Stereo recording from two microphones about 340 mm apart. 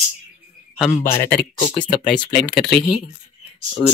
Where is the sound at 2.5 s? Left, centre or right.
Centre.